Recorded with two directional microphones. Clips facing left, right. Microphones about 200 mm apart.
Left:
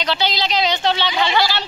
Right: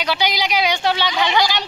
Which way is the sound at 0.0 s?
10° right (ahead or behind).